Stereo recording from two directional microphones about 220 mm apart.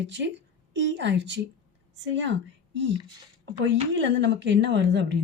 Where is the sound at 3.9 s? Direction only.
55° right (ahead or behind).